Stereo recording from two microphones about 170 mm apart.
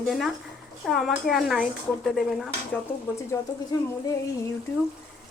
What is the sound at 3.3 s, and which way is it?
Speech, 15° left (ahead or behind).